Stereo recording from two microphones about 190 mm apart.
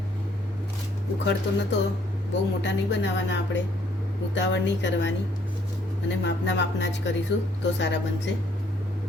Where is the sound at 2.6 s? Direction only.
70° left (ahead or behind).